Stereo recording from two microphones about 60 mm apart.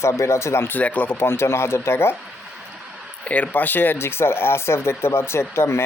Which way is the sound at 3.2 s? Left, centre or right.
Left.